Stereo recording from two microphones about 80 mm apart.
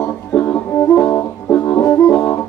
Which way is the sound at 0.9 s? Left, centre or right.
Centre.